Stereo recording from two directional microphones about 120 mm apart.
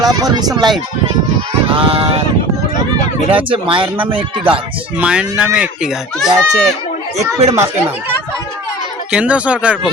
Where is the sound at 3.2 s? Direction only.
50° right (ahead or behind).